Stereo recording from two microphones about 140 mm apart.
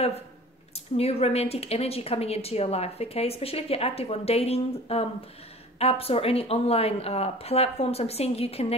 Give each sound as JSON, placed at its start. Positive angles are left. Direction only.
{"t": 0.9, "sound": "speech", "side_deg": 45}